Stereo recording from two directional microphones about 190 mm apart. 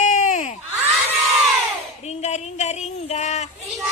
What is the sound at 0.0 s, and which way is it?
Crowd, 40° left (ahead or behind).